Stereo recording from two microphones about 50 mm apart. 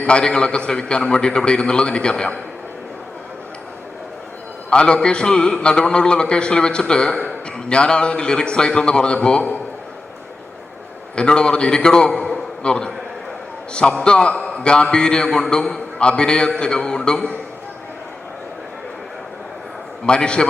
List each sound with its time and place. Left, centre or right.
0.0 s a man's voice: centre
4.7 s a man's voice: centre
11.1 s a man's voice: centre
12.2 s a sound: centre
13.7 s a man's voice: left
20.1 s a man's voice: centre